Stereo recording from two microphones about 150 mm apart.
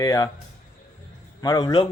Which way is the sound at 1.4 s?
25° left (ahead or behind).